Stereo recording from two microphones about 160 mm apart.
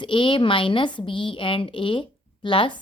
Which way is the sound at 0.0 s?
30° left (ahead or behind).